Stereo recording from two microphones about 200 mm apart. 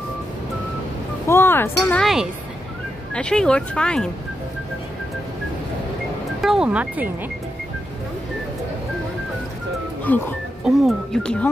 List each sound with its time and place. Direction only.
1.2 s speech: 10° left (ahead or behind)
6.4 s speech: 5° right (ahead or behind)
10.0 s speech: 10° left (ahead or behind)